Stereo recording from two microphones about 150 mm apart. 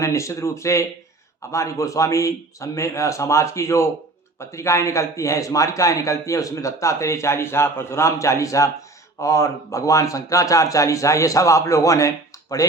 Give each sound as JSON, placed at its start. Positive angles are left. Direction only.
{"t": 0.0, "sound": "a man's voice", "side_deg": 20}